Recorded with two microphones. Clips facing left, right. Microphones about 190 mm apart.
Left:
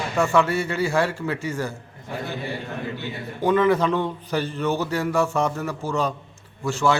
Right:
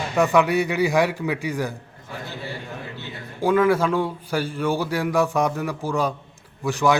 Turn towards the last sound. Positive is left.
turn(degrees=-15)  # may be behind; listen again after turning